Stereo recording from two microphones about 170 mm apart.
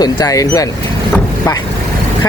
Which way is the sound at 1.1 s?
15° left (ahead or behind).